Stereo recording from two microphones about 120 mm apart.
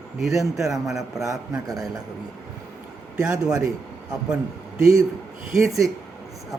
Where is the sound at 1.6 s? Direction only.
30° right (ahead or behind).